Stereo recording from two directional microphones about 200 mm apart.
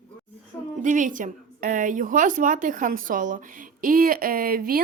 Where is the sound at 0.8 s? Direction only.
40° right (ahead or behind).